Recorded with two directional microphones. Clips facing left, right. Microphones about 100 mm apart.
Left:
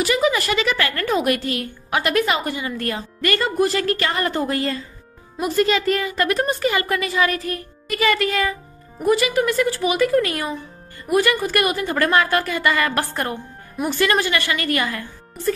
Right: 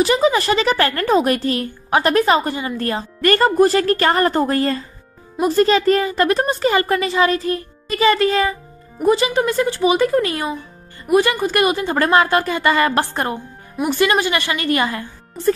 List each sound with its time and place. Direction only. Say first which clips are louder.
0.0 s a woman's voice: right 4 dB; 30° right (ahead or behind)